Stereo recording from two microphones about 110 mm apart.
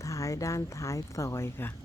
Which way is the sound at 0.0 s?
30° left (ahead or behind).